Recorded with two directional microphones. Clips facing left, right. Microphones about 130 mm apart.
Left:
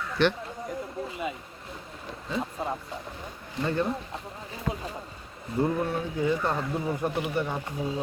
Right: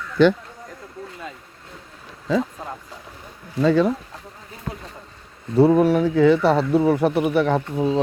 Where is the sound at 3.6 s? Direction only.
90° right.